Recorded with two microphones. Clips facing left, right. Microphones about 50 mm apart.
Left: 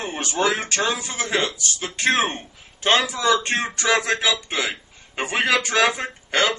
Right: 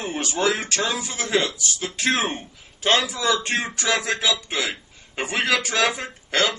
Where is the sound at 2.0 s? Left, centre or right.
Centre.